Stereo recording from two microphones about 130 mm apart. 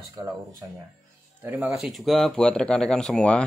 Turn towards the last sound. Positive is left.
turn(degrees=5)  # may be behind; listen again after turning